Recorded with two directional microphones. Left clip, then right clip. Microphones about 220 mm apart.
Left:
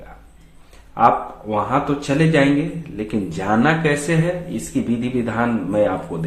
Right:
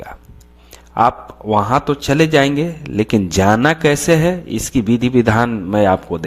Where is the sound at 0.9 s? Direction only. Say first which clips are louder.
Right 1 dB; 45° right (ahead or behind).